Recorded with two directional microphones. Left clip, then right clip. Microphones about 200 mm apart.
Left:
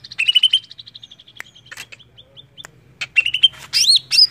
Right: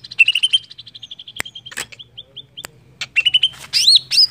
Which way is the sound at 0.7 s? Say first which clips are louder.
Right 3 dB; 50° right (ahead or behind).